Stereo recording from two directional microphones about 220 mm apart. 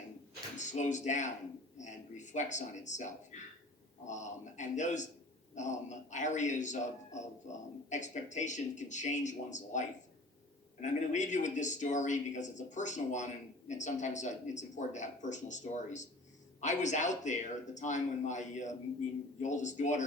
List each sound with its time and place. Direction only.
0.5 s speech: 35° left (ahead or behind)